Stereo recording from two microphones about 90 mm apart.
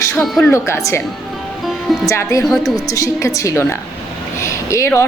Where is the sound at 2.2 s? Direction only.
35° left (ahead or behind).